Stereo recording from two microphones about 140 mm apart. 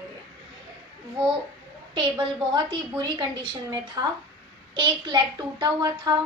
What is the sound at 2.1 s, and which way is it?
A woman's voice, 30° right (ahead or behind).